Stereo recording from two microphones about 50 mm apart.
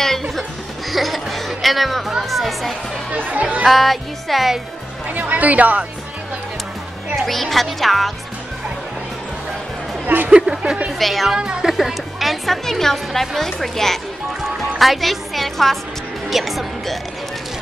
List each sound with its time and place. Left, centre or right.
0.8 s music: centre
3.2 s chatter: right
3.6 s a woman's voice: centre
5.0 s speech: right
7.2 s a woman's voice: centre
10.0 s speech: right
10.3 s speech: centre
10.9 s a woman's voice: centre
11.3 s speech: centre
11.7 s a woman's voice: centre